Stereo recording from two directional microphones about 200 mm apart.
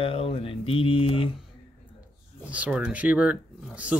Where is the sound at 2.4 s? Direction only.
5° right (ahead or behind).